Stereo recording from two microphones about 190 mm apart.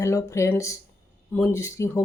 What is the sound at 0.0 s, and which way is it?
Speech, 15° left (ahead or behind).